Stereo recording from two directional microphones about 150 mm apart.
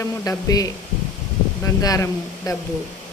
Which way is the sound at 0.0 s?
25° left (ahead or behind).